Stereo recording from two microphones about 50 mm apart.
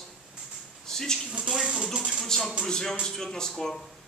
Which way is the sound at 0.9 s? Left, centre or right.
Centre.